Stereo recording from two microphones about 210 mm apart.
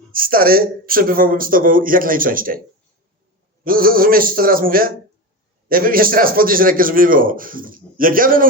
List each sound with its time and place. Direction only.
0.1 s a man's voice: 45° right (ahead or behind)
3.6 s a man's voice: 45° right (ahead or behind)